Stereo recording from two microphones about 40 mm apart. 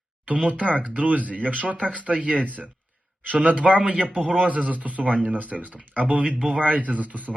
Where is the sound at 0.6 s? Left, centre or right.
Left.